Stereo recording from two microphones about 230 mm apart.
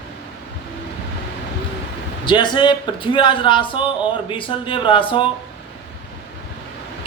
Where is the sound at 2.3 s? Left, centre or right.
Centre.